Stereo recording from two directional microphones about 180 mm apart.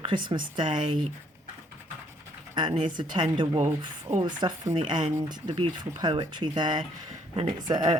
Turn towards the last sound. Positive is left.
turn(degrees=-25)  # may be behind; listen again after turning